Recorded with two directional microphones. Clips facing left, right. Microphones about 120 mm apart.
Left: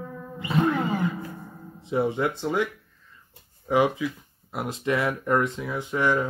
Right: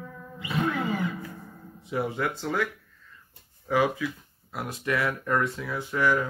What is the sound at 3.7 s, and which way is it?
Speech, 20° left (ahead or behind).